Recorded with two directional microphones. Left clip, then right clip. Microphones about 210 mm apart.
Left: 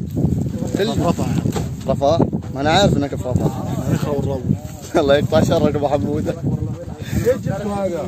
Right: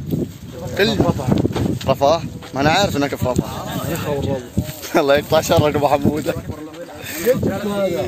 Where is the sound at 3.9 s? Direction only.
25° left (ahead or behind).